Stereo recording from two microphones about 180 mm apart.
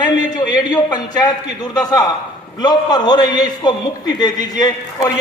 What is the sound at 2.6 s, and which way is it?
A man's voice, 25° left (ahead or behind).